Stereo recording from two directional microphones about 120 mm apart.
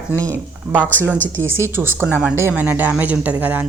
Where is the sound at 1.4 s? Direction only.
20° right (ahead or behind).